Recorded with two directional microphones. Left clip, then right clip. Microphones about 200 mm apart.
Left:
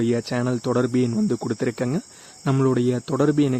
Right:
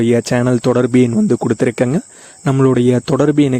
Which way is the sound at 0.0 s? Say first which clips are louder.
Right 9 dB; 40° right (ahead or behind).